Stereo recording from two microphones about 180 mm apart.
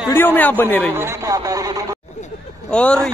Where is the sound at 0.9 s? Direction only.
15° right (ahead or behind).